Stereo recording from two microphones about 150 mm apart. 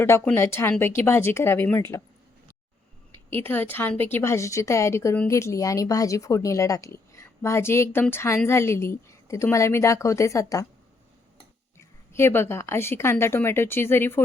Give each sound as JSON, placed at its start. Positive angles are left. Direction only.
{"t": 0.3, "sound": "a woman's voice", "side_deg": 15}
{"t": 3.1, "sound": "a woman's voice", "side_deg": 15}
{"t": 11.8, "sound": "a woman's voice", "side_deg": 15}